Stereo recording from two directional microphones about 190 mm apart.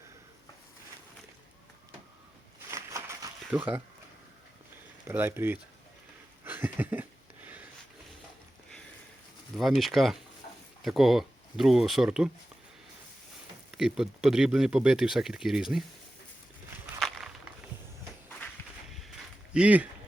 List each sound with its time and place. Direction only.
2.6 s a sound: 15° right (ahead or behind)
5.0 s speech: 10° right (ahead or behind)
6.4 s a sound: 10° right (ahead or behind)
9.6 s speech: centre (ahead or behind)
13.7 s speech: 5° right (ahead or behind)
17.0 s walk: centre (ahead or behind)
19.5 s speech: 5° right (ahead or behind)